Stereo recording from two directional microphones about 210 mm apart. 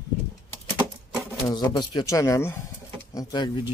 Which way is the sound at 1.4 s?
20° left (ahead or behind).